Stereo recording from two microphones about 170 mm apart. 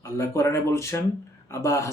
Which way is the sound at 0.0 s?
15° left (ahead or behind).